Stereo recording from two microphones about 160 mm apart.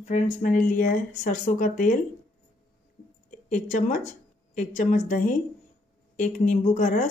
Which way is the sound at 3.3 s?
55° left (ahead or behind).